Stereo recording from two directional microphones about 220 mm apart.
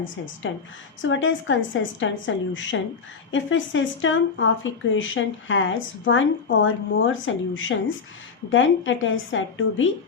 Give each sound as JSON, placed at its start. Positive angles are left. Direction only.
{"t": 0.4, "sound": "speech", "side_deg": 60}